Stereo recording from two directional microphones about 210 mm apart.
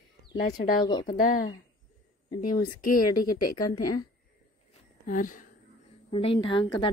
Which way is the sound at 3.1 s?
20° left (ahead or behind).